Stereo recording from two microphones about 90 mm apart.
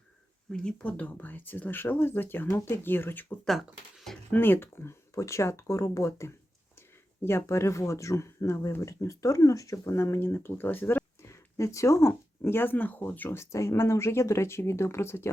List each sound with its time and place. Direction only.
0.5 s speech: 10° left (ahead or behind)
3.4 s speech: centre (ahead or behind)
4.3 s speech: 25° left (ahead or behind)
13.4 s speech: 35° left (ahead or behind)